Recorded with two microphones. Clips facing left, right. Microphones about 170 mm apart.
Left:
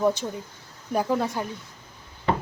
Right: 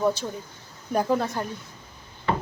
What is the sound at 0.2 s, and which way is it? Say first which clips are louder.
Speech: left 1 dB; 15° left (ahead or behind).